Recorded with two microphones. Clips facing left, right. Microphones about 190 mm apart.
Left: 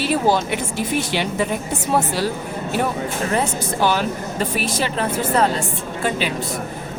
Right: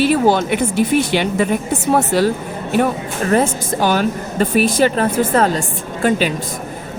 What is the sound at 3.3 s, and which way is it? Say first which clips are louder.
A woman's voice: right 9 dB; 45° right (ahead or behind).